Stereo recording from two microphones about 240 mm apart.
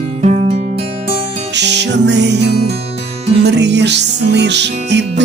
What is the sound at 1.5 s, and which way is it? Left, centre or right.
Music, right.